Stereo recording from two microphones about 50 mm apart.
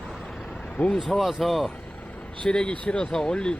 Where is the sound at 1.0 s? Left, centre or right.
Centre.